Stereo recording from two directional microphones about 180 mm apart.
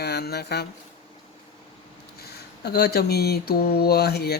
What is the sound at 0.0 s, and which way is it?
Speech, 60° left (ahead or behind).